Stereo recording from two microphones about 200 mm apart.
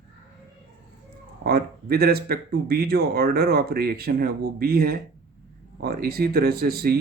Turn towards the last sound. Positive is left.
turn(degrees=-50)  # may be behind; listen again after turning